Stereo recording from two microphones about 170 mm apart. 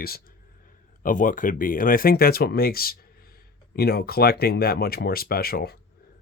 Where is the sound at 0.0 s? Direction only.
60° left (ahead or behind).